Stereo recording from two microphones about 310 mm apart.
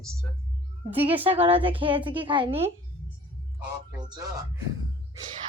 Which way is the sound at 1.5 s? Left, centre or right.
Centre.